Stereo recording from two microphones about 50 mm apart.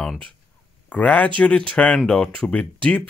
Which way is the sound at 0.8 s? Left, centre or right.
Left.